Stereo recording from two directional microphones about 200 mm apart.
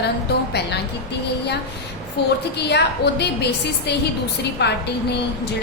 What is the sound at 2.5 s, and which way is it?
A woman's voice, 55° left (ahead or behind).